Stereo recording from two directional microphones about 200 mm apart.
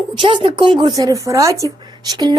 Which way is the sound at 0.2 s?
25° right (ahead or behind).